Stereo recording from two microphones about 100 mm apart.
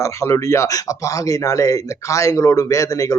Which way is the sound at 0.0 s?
30° left (ahead or behind).